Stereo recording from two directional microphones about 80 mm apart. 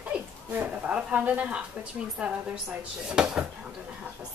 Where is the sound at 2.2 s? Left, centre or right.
Centre.